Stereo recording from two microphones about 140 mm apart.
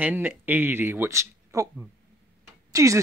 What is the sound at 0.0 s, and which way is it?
Speech, 15° right (ahead or behind).